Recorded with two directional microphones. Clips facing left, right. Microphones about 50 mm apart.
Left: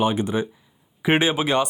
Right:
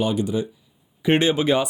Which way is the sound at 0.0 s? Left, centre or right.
Left.